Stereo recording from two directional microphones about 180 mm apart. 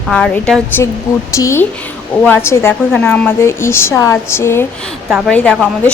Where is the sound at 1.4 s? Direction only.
15° left (ahead or behind).